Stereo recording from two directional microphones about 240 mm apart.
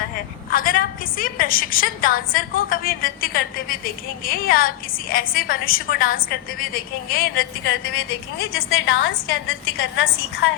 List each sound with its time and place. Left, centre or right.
0.5 s a woman's voice: left
8.5 s a woman's voice: left